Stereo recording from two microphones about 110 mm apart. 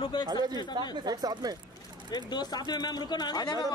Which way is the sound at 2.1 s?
40° left (ahead or behind).